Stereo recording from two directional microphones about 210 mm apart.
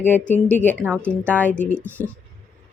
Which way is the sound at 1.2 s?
5° left (ahead or behind).